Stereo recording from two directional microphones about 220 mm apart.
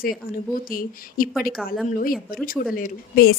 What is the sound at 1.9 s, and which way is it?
Speech, 40° left (ahead or behind).